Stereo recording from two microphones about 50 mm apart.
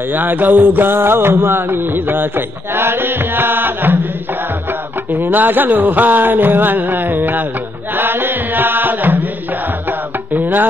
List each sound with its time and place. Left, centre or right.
0.1 s music: right
4.6 s speech: right
7.9 s mantra: right